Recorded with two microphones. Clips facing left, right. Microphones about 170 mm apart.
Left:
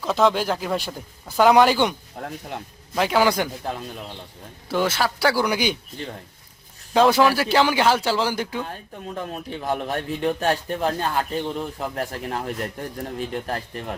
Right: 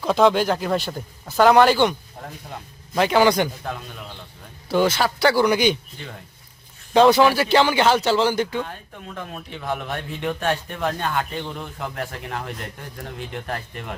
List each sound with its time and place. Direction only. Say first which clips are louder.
0.0 s a man's voice: right 3 dB; centre (ahead or behind)
4.7 s a man's voice: right 3 dB; centre (ahead or behind)
6.9 s a man's voice: right 2 dB; 5° left (ahead or behind)
8.6 s speech: left 3 dB; 30° left (ahead or behind)